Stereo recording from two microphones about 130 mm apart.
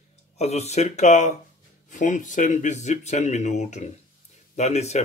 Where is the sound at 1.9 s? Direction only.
80° left.